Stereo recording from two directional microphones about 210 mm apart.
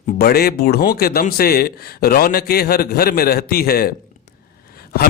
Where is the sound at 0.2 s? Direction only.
45° left (ahead or behind).